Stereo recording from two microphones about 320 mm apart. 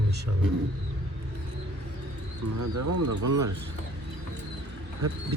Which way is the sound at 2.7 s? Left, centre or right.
Right.